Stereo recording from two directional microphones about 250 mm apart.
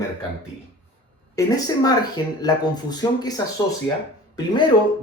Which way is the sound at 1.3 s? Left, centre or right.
Centre.